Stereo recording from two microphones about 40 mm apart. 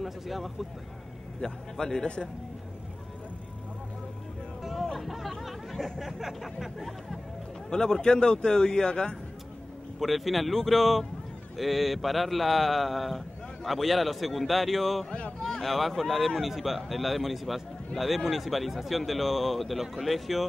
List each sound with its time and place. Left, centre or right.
0.0 s speech: centre
1.4 s a man's voice: centre
4.9 s speech: centre
7.7 s a man's voice: centre
9.9 s speech: centre
15.0 s speech: left
15.4 s speech: centre